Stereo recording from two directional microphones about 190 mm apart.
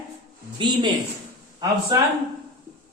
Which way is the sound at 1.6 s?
20° right (ahead or behind).